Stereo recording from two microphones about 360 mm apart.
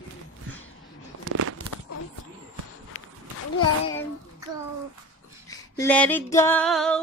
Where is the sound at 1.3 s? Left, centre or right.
Right.